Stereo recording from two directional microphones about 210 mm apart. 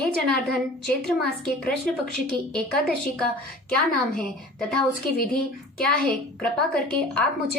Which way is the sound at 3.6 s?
45° left (ahead or behind).